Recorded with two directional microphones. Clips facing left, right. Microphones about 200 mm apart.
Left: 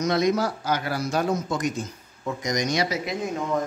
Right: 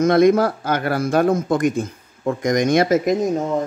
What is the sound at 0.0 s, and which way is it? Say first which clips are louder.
Speech: right 8 dB; 55° right (ahead or behind).